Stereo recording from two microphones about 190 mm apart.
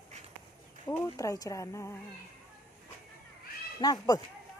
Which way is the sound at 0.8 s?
15° left (ahead or behind).